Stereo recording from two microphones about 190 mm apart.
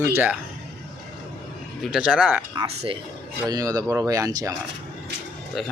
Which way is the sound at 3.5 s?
20° right (ahead or behind).